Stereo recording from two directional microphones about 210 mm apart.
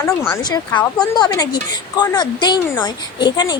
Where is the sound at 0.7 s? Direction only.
5° left (ahead or behind).